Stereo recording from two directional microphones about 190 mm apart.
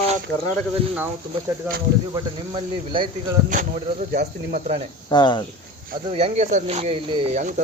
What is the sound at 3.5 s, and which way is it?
Speech, 40° right (ahead or behind).